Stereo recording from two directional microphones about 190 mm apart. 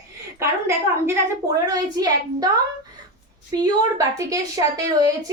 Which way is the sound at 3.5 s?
20° right (ahead or behind).